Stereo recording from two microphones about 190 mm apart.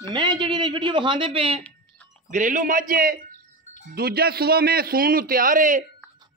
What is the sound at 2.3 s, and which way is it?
A man's voice, 40° right (ahead or behind).